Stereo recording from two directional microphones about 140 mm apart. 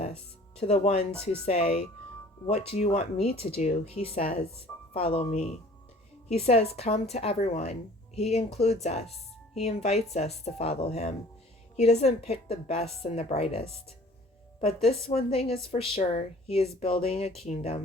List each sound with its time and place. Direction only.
0.6 s a woman's voice: 50° left (ahead or behind)
15.0 s a woman's voice: 45° left (ahead or behind)